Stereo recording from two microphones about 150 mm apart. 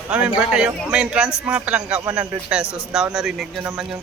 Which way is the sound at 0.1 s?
5° right (ahead or behind).